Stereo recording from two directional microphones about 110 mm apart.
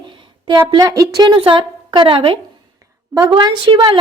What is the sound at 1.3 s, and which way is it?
Speech, 50° right (ahead or behind).